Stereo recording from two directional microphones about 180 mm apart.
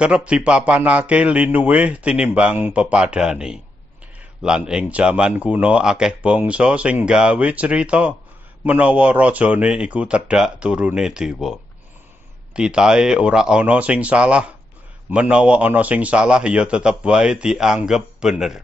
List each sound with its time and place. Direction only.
0.0 s speech: 5° right (ahead or behind)